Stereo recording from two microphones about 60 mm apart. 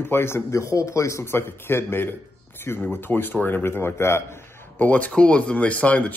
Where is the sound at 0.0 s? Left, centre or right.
Left.